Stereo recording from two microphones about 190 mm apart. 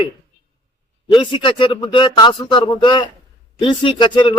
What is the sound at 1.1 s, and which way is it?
Speech, 25° left (ahead or behind).